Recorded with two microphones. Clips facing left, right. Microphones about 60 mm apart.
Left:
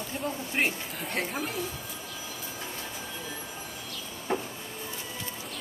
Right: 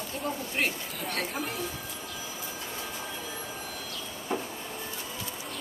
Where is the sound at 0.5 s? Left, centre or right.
Centre.